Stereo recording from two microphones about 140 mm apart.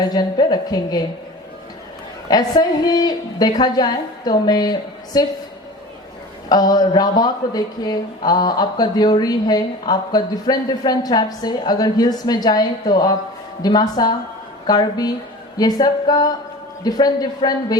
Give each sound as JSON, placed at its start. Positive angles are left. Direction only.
{"t": 0.1, "sound": "speech", "side_deg": 30}
{"t": 2.3, "sound": "speech", "side_deg": 30}
{"t": 6.5, "sound": "speech", "side_deg": 30}